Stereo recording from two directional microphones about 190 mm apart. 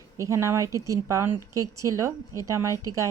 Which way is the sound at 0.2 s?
15° right (ahead or behind).